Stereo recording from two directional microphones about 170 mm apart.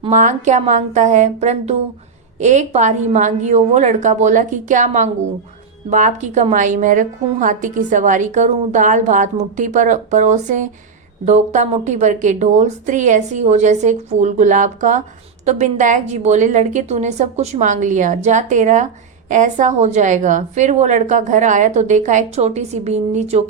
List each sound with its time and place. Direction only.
0.1 s a woman's voice: 45° right (ahead or behind)